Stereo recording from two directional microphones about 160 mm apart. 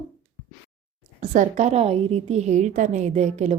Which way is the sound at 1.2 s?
50° right (ahead or behind).